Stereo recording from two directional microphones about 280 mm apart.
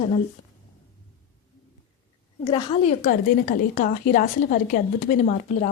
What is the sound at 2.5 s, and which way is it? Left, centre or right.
A woman's voice, centre.